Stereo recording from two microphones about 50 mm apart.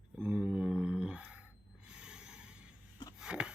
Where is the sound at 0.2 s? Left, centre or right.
Centre.